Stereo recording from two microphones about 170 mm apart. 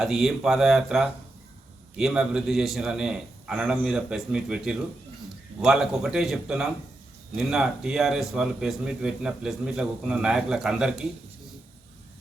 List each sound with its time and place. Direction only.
0.0 s a man's voice: centre (ahead or behind)